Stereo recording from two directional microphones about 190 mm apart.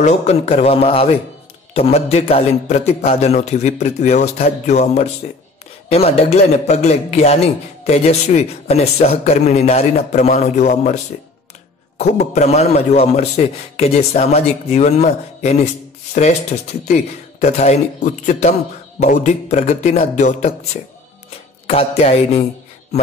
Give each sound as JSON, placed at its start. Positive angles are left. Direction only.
{"t": 0.0, "sound": "a man's voice", "side_deg": 35}
{"t": 12.0, "sound": "a man's voice", "side_deg": 35}